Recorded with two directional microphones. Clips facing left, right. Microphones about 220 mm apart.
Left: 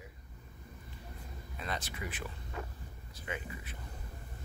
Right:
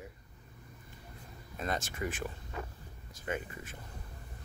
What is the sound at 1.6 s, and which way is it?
Speech, 45° right (ahead or behind).